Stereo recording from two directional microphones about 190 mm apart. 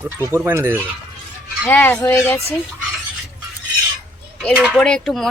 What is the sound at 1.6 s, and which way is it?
Speech, 10° left (ahead or behind).